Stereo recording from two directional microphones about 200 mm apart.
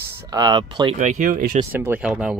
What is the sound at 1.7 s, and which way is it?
Speech, 10° right (ahead or behind).